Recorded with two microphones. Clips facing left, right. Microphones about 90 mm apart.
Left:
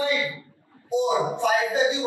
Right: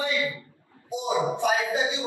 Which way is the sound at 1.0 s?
20° left (ahead or behind).